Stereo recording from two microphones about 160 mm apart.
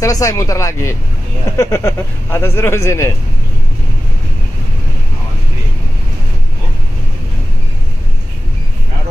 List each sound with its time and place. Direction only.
0.0 s speech: 20° left (ahead or behind)